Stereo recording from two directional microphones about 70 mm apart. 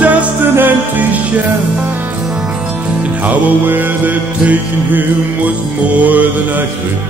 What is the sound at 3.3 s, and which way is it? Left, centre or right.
Music, right.